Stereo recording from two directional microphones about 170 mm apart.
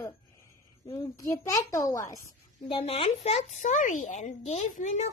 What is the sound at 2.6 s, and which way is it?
Speech, 30° left (ahead or behind).